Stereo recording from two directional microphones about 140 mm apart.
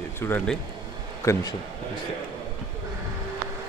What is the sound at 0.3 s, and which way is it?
A man's voice, 15° left (ahead or behind).